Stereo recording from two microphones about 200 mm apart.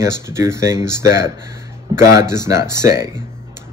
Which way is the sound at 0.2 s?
15° right (ahead or behind).